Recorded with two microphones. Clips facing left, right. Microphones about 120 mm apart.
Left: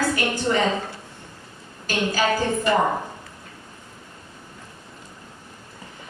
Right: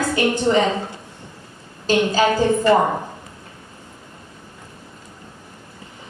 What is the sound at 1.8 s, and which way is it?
Speech, 20° right (ahead or behind).